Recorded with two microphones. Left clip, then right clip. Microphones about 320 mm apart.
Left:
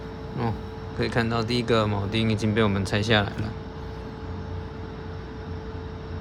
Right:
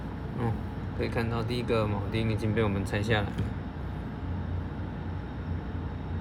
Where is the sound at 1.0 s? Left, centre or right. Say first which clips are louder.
Left 6 dB; left.